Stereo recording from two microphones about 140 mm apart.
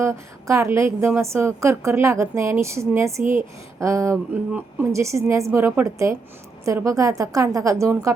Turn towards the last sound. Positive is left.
turn(degrees=-20)  # may be behind; listen again after turning